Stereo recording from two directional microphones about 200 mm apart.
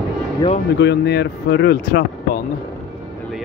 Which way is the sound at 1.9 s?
50° left (ahead or behind).